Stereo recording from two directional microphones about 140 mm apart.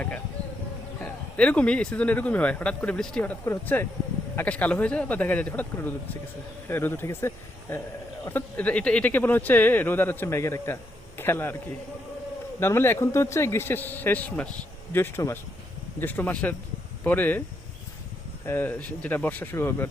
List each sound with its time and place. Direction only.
1.0 s speech: 10° left (ahead or behind)
12.5 s speech: 15° left (ahead or behind)
18.4 s speech: 15° left (ahead or behind)